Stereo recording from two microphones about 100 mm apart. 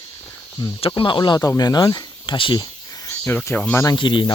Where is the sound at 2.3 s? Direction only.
50° left (ahead or behind); by 3.1 s 35° left (ahead or behind).